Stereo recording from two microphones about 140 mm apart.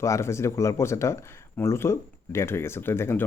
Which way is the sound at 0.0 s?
20° left (ahead or behind).